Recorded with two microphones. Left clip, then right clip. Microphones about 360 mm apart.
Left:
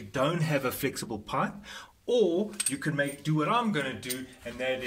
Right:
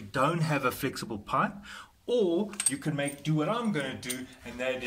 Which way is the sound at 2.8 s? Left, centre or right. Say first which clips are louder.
Left 3 dB; centre.